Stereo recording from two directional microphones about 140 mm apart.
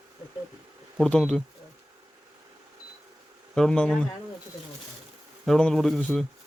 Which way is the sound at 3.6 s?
5° left (ahead or behind).